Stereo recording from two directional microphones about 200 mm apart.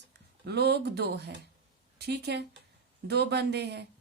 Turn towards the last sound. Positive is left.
turn(degrees=-55)  # may be behind; listen again after turning